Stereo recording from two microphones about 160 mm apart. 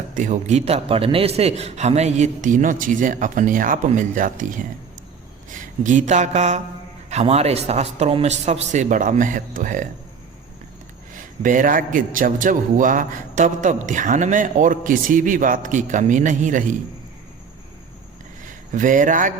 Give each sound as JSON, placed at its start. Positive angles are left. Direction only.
{"t": 0.2, "sound": "a man's voice", "side_deg": -50}
{"t": 11.1, "sound": "a man's voice", "side_deg": -55}
{"t": 18.4, "sound": "speech", "side_deg": -55}